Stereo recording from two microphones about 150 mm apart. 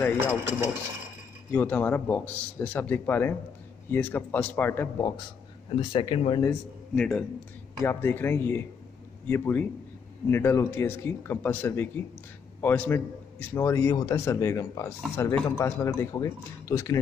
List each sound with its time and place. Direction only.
0.2 s wood: 15° right (ahead or behind)
1.5 s speech: 10° left (ahead or behind)
5.7 s speech: 30° left (ahead or behind)
7.0 s a man's voice: 5° left (ahead or behind); by 17.0 s 20° left (ahead or behind)